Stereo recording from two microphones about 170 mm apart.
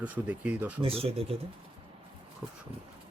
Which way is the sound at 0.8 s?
35° right (ahead or behind).